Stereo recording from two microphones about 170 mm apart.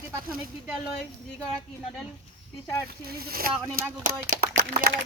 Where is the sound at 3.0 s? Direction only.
60° right (ahead or behind).